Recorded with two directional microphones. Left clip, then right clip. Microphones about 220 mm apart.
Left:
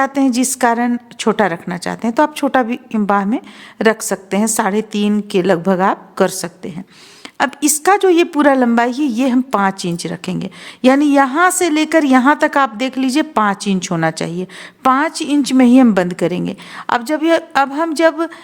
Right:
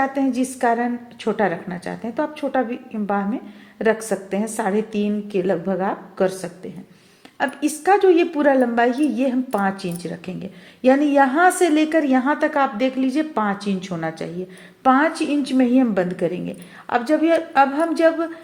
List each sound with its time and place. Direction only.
0.0 s a woman's voice: 35° left (ahead or behind)